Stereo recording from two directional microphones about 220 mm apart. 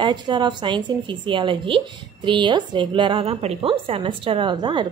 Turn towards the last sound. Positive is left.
turn(degrees=-20)  # may be behind; listen again after turning